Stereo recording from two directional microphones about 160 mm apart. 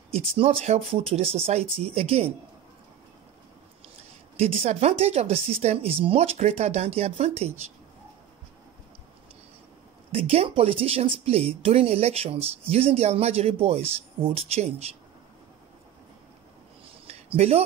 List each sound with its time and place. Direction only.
0.1 s speech: 35° right (ahead or behind)
4.4 s speech: 40° right (ahead or behind)
10.1 s speech: 40° right (ahead or behind)
17.1 s speech: 40° right (ahead or behind)